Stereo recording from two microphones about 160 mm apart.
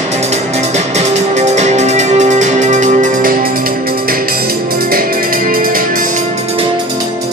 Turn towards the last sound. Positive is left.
turn(degrees=-55)  # may be behind; listen again after turning